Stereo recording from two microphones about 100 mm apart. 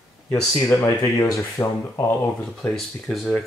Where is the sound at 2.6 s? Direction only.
Centre (ahead or behind).